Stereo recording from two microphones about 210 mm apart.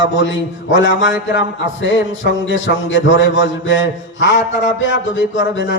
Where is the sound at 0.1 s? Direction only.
60° left (ahead or behind).